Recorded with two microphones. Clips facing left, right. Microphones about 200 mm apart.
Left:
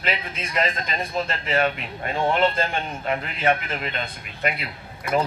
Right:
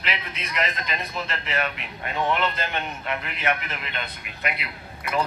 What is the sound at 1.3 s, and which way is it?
Speech, 45° left (ahead or behind).